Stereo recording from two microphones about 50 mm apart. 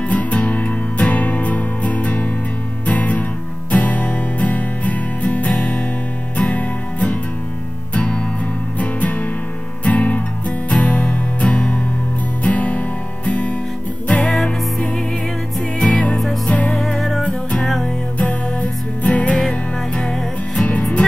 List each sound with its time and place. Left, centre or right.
0.1 s music: left
14.3 s music: centre
15.8 s music: left
16.7 s music: centre
18.1 s music: left
20.0 s music: centre